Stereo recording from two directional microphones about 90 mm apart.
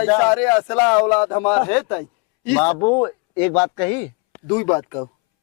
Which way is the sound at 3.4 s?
20° left (ahead or behind).